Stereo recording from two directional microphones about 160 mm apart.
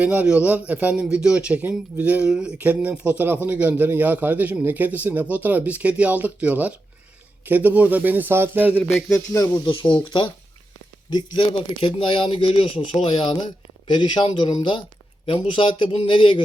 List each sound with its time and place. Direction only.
0.0 s a man's voice: 10° right (ahead or behind)
9.0 s speech: 20° left (ahead or behind)
9.9 s speech: 30° left (ahead or behind)